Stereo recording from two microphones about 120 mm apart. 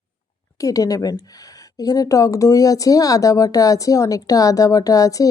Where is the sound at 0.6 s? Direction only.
30° left (ahead or behind).